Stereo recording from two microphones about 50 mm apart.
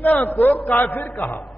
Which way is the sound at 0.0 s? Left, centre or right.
Left.